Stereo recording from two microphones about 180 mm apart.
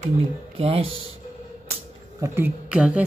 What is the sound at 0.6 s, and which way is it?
Speech, 30° right (ahead or behind).